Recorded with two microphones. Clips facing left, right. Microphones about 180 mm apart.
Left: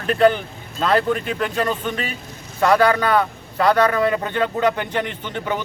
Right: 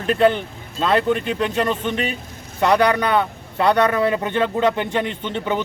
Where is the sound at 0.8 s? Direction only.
25° right (ahead or behind).